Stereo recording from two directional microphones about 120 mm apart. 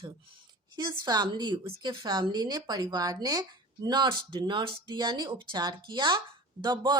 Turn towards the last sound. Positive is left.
turn(degrees=-35)  # may be behind; listen again after turning